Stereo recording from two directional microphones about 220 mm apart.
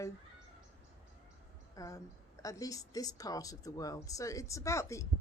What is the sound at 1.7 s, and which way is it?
Speech, 15° left (ahead or behind).